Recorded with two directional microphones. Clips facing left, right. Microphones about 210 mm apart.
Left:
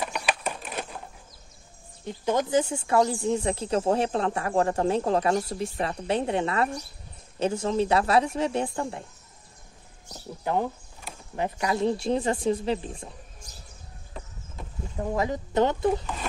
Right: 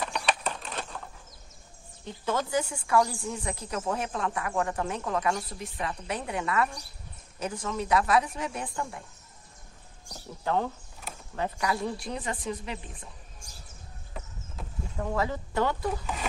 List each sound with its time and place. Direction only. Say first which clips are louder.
0.0 s a sound: left 1 dB; 5° left (ahead or behind)
0.6 s typewriter: left 3 dB; 10° left (ahead or behind)
2.0 s speech: left 5 dB; 15° left (ahead or behind)
10.4 s speech: left 2 dB; 15° left (ahead or behind)
13.4 s a sound: left 2 dB; 10° right (ahead or behind)
15.0 s speech: left 3 dB; 20° left (ahead or behind)